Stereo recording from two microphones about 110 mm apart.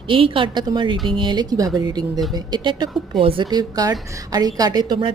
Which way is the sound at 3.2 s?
60° right (ahead or behind).